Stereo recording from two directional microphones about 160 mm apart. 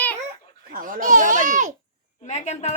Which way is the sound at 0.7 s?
60° right (ahead or behind).